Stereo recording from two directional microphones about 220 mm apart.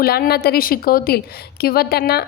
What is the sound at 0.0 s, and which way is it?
A woman's voice, 45° left (ahead or behind).